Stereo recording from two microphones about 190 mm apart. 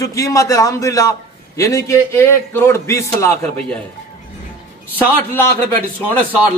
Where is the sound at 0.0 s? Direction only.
15° left (ahead or behind).